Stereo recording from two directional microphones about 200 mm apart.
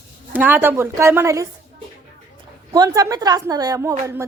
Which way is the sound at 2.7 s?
20° right (ahead or behind).